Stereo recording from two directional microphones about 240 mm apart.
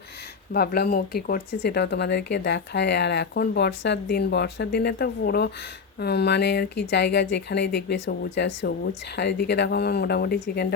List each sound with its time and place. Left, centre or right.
0.5 s speech: left